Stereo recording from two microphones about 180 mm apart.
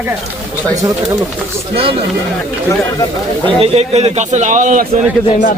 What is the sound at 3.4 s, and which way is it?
A man's voice, 35° right (ahead or behind).